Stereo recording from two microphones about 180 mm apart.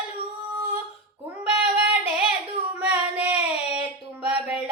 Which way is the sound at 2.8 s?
5° right (ahead or behind).